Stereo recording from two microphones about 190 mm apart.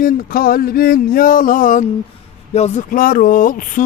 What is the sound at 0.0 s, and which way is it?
Speech, 50° left (ahead or behind).